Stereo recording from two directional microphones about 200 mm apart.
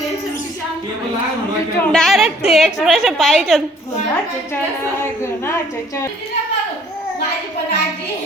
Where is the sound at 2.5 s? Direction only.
Centre (ahead or behind).